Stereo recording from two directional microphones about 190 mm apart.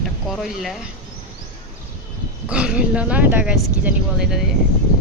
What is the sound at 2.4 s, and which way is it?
Speech, 5° right (ahead or behind).